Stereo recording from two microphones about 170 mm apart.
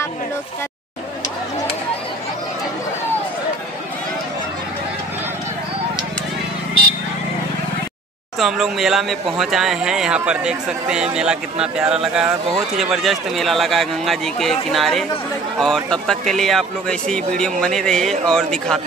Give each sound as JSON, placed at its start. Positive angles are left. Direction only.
{"t": 8.4, "sound": "speech", "side_deg": 0}